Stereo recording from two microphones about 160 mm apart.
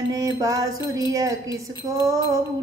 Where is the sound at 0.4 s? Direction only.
20° right (ahead or behind).